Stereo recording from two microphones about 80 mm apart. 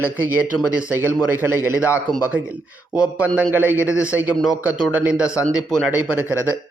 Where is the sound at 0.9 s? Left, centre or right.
Right.